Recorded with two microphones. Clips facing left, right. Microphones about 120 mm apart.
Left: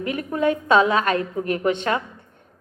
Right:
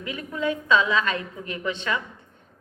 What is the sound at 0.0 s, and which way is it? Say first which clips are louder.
A woman's voice: left 6 dB; 50° left (ahead or behind).